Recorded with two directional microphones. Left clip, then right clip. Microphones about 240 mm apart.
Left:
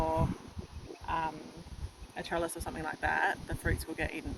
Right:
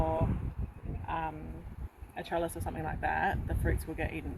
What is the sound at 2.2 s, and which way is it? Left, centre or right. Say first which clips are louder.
Speech: right 1 dB; centre.